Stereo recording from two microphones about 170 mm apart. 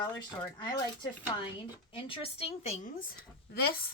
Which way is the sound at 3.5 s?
60° left (ahead or behind).